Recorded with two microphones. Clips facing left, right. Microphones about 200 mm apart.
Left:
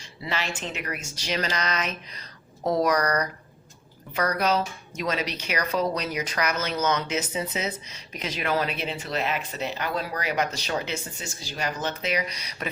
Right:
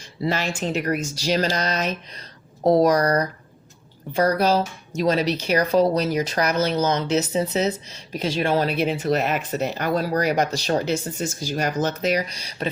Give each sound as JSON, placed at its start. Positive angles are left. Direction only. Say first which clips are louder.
{"t": 0.2, "sound": "speech", "louder": "right 7 dB", "side_deg": -45}